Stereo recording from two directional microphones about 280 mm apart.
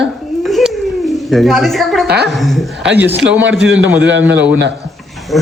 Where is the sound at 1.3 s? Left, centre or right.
Centre.